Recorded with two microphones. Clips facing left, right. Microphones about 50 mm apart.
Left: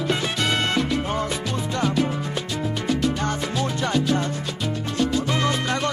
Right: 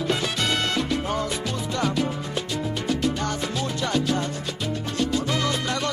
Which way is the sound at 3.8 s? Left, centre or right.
Left.